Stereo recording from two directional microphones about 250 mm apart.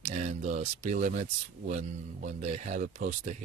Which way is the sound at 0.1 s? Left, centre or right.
Right.